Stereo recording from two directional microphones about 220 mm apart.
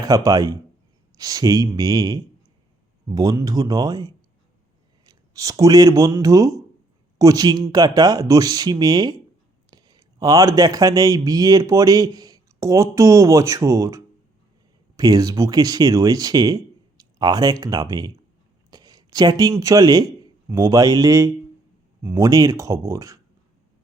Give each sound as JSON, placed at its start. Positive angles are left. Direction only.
{"t": 0.0, "sound": "speech", "side_deg": -15}